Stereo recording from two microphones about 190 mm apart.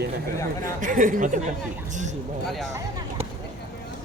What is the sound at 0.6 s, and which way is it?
Speech, 45° right (ahead or behind).